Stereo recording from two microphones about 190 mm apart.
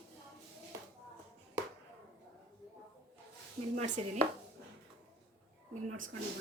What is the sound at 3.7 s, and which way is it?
Speech, 40° right (ahead or behind).